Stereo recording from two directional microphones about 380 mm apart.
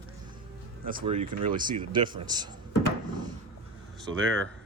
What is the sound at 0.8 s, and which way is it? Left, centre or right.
A man's voice, centre.